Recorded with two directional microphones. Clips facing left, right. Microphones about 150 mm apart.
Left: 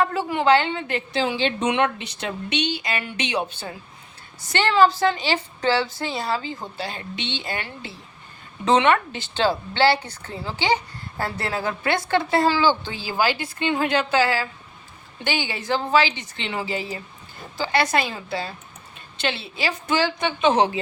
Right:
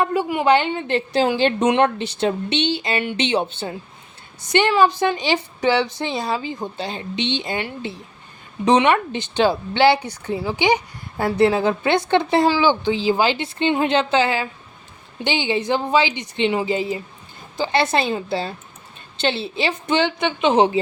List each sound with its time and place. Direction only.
0.0 s a woman's voice: 15° right (ahead or behind)
0.9 s a woman's voice: 40° right (ahead or behind); by 20.7 s 20° right (ahead or behind)